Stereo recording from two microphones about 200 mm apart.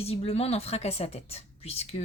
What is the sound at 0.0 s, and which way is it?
Speech, 30° left (ahead or behind).